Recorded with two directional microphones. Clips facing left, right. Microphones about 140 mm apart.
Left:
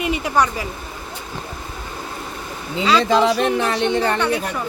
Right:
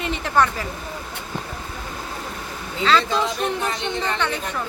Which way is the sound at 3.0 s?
85° left.